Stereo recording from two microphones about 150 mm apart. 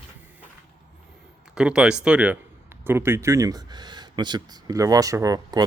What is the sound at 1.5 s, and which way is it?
Speech, 5° right (ahead or behind).